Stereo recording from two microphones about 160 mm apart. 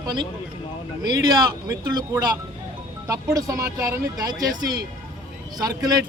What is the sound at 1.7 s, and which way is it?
Speech, 25° right (ahead or behind).